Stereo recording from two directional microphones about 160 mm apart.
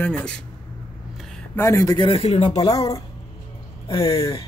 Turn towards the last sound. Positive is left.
turn(degrees=20)  # may be behind; listen again after turning